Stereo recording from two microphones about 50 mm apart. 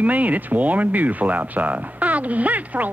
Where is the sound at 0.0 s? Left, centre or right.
Right.